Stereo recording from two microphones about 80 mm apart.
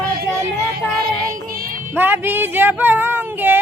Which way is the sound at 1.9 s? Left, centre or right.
Right.